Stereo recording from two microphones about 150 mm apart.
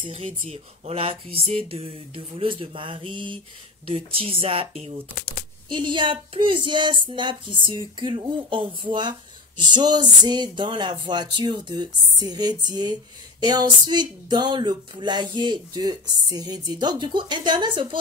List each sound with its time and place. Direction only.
0.0 s speech: 40° right (ahead or behind)
5.7 s speech: 30° right (ahead or behind)